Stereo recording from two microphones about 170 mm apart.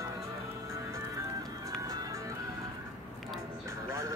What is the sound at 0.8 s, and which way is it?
Music, 20° right (ahead or behind).